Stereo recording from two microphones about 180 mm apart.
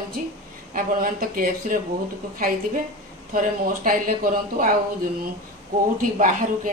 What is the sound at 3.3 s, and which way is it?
A woman's voice, 50° right (ahead or behind).